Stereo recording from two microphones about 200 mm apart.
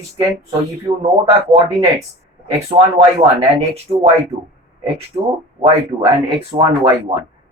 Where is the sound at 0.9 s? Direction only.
30° right (ahead or behind).